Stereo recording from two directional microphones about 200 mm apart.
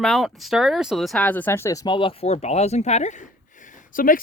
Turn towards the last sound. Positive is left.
turn(degrees=45)  # may be behind; listen again after turning